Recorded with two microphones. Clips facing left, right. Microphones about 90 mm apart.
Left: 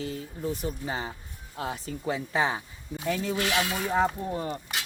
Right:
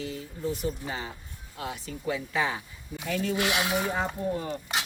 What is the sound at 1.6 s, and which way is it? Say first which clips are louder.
Speech: left 3 dB; 35° left (ahead or behind).